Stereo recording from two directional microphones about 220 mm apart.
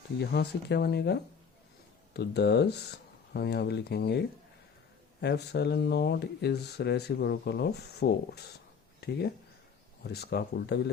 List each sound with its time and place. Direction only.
0.2 s speech: 50° left (ahead or behind)